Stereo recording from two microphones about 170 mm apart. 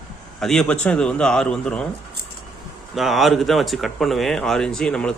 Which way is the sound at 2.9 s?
Centre (ahead or behind).